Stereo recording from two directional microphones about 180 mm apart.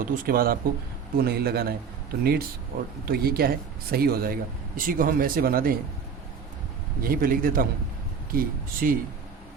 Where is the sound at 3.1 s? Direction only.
55° right (ahead or behind).